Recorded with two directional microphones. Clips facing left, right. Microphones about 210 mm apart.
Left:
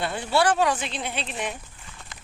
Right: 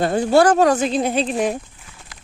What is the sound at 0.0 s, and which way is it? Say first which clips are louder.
Speech: right 9 dB; 45° right (ahead or behind).